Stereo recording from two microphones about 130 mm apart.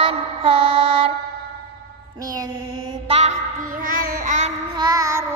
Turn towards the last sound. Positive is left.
turn(degrees=-25)  # may be behind; listen again after turning